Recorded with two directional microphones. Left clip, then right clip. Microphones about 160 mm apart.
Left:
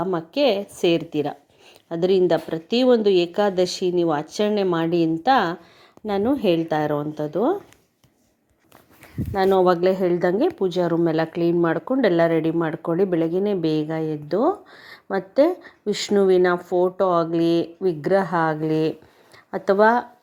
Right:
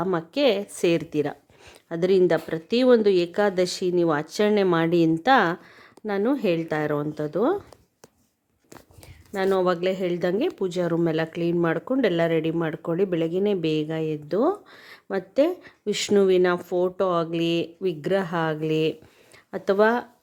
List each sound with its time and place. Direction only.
0.0 s speech: 15° right (ahead or behind)
6.1 s a woman's voice: centre (ahead or behind)
9.3 s a woman's voice: centre (ahead or behind)
14.7 s a sound: 45° right (ahead or behind)
15.0 s speech: 10° right (ahead or behind)
18.6 s speech: 40° right (ahead or behind)